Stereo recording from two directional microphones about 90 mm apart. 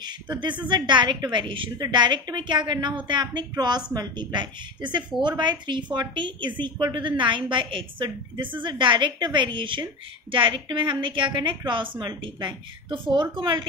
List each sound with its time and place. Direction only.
0.0 s a woman's voice: 55° right (ahead or behind)